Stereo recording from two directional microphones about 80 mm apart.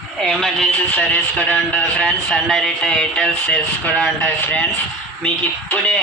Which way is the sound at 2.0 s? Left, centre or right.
Centre.